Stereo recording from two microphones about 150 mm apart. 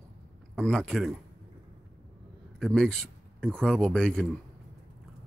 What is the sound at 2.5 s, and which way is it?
A man's voice, 5° left (ahead or behind).